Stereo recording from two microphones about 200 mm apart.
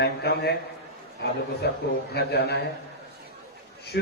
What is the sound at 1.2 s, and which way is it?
A man's voice, 55° left (ahead or behind).